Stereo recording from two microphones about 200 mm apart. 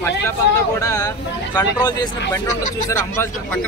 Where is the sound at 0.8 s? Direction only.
15° left (ahead or behind).